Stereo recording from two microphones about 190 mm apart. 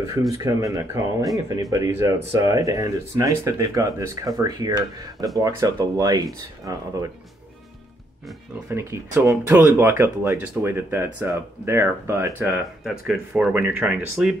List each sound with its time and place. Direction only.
0.4 s speech: 15° right (ahead or behind)
8.6 s speech: 15° right (ahead or behind)
12.8 s speech: centre (ahead or behind)